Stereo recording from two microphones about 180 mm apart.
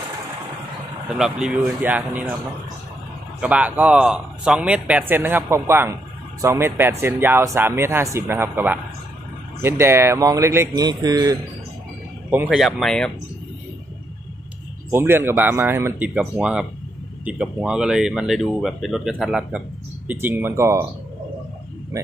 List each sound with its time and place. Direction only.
1.0 s a man's voice: 5° right (ahead or behind)
3.3 s a man's voice: 5° right (ahead or behind)
12.3 s speech: 5° right (ahead or behind)
14.9 s a man's voice: 15° right (ahead or behind)